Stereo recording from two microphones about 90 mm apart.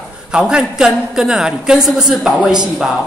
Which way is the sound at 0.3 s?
10° right (ahead or behind).